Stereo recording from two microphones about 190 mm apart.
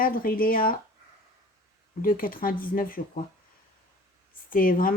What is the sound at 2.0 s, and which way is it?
Speech, 45° left (ahead or behind).